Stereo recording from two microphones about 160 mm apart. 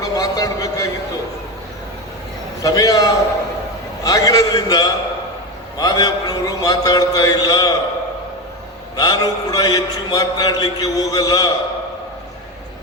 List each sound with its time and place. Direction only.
0.0 s a sound: 20° left (ahead or behind)
2.6 s a man's voice: 20° left (ahead or behind)
9.0 s a man's voice: 25° left (ahead or behind)